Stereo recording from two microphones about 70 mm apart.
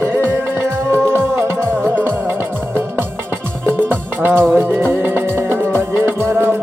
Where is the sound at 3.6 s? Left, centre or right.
Right.